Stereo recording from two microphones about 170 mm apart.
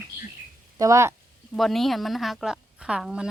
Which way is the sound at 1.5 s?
Centre (ahead or behind).